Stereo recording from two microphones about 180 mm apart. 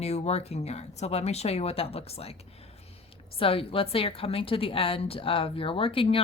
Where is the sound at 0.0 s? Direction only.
35° left (ahead or behind).